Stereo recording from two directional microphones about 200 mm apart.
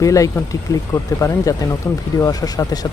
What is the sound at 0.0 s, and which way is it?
Speech, 15° left (ahead or behind).